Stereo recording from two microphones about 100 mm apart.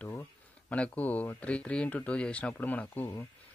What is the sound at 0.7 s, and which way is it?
Speech, 15° left (ahead or behind).